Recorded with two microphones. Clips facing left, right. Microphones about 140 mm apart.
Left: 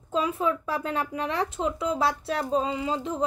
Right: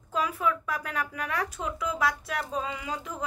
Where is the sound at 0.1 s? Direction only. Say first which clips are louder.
Left 3 dB; 25° left (ahead or behind).